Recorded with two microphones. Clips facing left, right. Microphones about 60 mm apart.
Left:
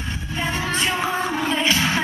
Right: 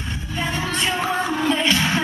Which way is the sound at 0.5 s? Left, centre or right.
Left.